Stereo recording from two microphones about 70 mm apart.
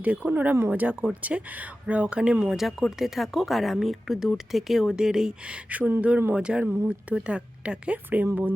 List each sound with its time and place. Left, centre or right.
0.0 s speech: right
6.0 s speech: centre